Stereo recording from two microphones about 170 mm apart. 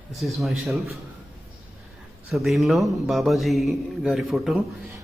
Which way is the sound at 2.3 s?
Centre (ahead or behind).